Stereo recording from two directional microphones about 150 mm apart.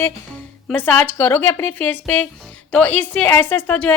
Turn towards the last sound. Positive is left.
turn(degrees=10)  # may be behind; listen again after turning